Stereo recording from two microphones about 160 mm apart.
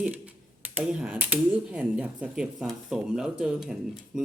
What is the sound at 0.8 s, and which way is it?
Speech, 10° right (ahead or behind).